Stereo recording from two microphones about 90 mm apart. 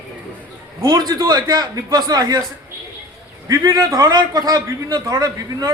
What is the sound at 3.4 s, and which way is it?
A man's voice, 45° right (ahead or behind).